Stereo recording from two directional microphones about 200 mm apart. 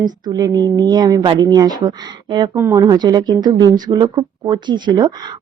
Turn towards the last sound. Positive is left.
turn(degrees=-20)  # may be behind; listen again after turning